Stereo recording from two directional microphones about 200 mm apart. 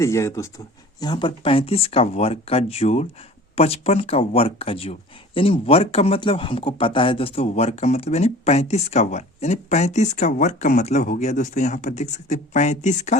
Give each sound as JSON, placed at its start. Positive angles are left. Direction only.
{"t": 0.0, "sound": "speech", "side_deg": 15}